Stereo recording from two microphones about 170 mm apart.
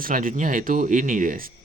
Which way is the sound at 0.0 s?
55° right (ahead or behind).